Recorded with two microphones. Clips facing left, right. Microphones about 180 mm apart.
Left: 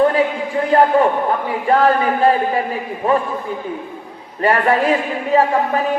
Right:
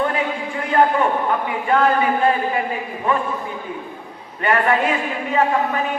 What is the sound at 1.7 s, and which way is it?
Speech, 35° left (ahead or behind).